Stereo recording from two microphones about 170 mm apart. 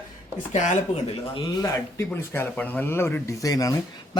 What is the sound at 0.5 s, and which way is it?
Speech, 45° left (ahead or behind).